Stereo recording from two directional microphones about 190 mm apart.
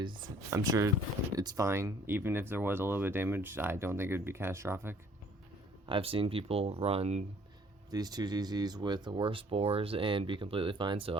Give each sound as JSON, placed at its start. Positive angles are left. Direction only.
{"t": 0.0, "sound": "speech", "side_deg": -20}
{"t": 5.8, "sound": "speech", "side_deg": -25}
{"t": 7.9, "sound": "speech", "side_deg": -20}